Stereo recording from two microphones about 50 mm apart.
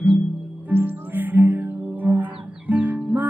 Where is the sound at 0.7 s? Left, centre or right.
Right.